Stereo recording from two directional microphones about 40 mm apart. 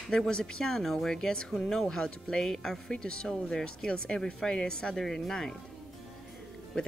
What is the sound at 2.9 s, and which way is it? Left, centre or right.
Speech, left.